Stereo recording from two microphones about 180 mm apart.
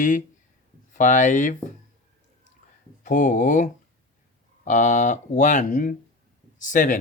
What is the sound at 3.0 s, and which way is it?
Speech, 45° left (ahead or behind).